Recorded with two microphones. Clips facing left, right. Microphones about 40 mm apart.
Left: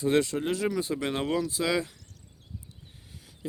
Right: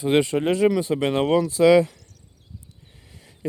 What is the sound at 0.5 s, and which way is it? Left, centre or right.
Speech, right.